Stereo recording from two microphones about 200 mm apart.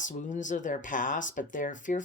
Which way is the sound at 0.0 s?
40° left (ahead or behind).